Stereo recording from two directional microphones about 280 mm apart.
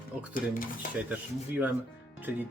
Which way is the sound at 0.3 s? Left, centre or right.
Left.